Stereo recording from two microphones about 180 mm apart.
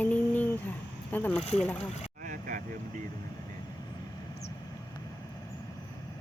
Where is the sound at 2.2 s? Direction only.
50° right (ahead or behind).